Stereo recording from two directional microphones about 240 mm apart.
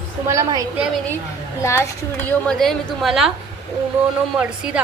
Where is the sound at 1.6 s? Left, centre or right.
Centre.